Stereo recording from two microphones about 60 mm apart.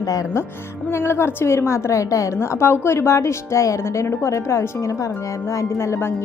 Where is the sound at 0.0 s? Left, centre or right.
Left.